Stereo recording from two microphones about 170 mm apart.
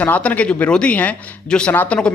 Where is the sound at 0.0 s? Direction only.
10° left (ahead or behind).